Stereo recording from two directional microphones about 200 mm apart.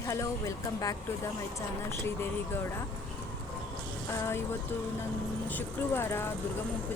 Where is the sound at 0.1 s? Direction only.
15° left (ahead or behind).